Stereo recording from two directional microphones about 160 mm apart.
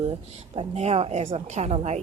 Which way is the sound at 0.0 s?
40° right (ahead or behind).